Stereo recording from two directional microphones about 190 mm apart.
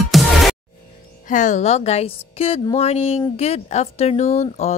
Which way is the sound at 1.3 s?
40° left (ahead or behind).